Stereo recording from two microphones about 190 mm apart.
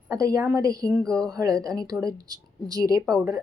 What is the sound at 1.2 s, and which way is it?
A woman's voice, 20° right (ahead or behind).